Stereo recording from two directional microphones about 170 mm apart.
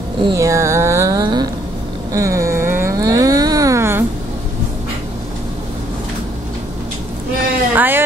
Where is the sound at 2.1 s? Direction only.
20° right (ahead or behind).